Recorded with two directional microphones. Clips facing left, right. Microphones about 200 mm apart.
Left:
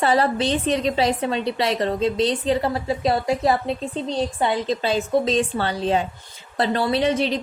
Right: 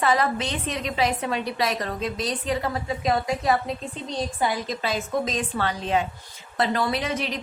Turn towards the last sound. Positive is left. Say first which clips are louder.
# left 7 dB
turn(degrees=30)  # may be behind; listen again after turning